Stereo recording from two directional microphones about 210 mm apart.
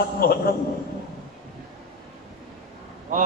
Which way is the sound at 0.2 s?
45° left (ahead or behind).